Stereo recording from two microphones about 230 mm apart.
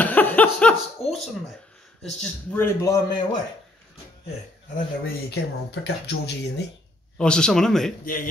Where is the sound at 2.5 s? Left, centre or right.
Centre.